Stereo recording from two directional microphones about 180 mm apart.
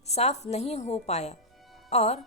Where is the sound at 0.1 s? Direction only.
35° left (ahead or behind).